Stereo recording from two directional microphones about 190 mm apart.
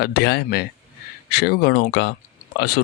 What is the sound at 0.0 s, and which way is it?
Speech, 60° left (ahead or behind).